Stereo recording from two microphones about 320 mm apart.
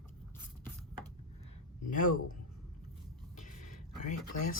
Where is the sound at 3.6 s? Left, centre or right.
Left.